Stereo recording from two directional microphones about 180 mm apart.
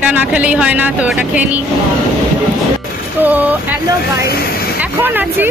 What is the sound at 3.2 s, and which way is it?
Speech, 10° right (ahead or behind).